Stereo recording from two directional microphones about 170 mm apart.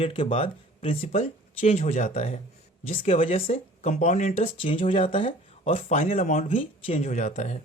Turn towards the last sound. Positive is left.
turn(degrees=45)  # may be behind; listen again after turning